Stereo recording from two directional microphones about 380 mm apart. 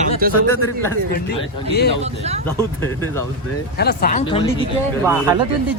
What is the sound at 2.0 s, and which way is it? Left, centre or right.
Speech, centre.